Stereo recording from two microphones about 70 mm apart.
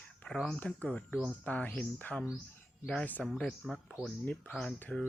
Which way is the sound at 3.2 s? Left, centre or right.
Centre.